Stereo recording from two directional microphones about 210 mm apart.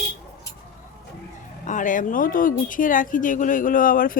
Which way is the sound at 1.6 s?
40° left (ahead or behind).